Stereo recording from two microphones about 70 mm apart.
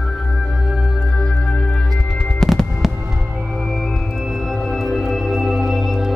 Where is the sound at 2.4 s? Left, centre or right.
Centre.